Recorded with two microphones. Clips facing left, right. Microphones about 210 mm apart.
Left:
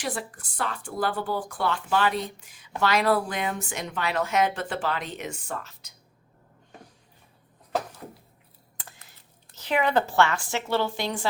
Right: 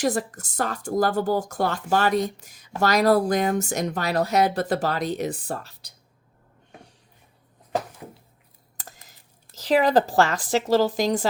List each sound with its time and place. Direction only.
0.0 s speech: 45° right (ahead or behind)
8.8 s computer keyboard: 40° right (ahead or behind)
9.6 s speech: 35° right (ahead or behind)